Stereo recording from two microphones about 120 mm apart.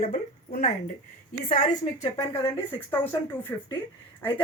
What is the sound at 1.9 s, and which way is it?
A woman's voice, 25° left (ahead or behind).